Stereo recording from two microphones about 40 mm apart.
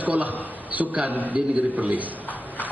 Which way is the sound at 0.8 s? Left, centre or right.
Right.